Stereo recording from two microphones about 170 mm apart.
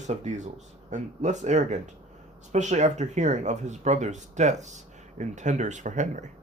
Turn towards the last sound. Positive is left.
turn(degrees=-45)  # may be behind; listen again after turning